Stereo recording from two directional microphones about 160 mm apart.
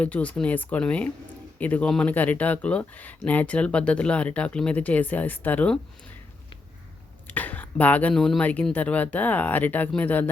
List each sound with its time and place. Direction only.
0.0 s speech: 10° left (ahead or behind)
7.3 s speech: 10° left (ahead or behind)